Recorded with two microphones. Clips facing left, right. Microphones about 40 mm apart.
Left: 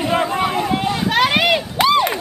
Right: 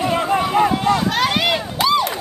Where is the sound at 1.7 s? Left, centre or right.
Left.